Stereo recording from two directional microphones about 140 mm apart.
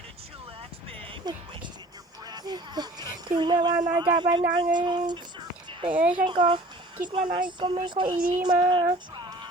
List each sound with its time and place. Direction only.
1.0 s music: 30° right (ahead or behind)
2.2 s a sound: 30° right (ahead or behind)
3.9 s speech: 35° right (ahead or behind)
5.9 s speech: 10° right (ahead or behind)
6.2 s speech: 35° right (ahead or behind)